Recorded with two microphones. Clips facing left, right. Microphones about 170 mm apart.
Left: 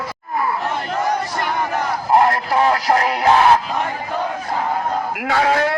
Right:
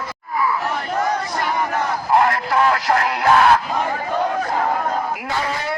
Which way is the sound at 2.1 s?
30° left (ahead or behind).